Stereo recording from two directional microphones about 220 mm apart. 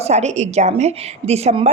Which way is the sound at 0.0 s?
30° right (ahead or behind).